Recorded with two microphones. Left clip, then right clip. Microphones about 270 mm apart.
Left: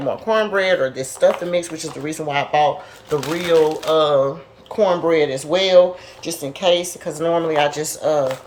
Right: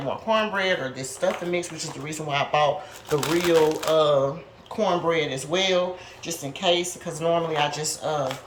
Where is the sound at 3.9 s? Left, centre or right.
Centre.